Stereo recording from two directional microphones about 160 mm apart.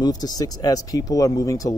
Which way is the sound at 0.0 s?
25° left (ahead or behind).